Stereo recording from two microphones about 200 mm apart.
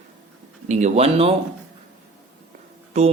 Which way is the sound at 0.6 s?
35° right (ahead or behind).